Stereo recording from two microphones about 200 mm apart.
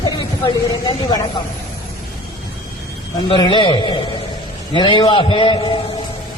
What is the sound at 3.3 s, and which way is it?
A man's voice, 25° left (ahead or behind).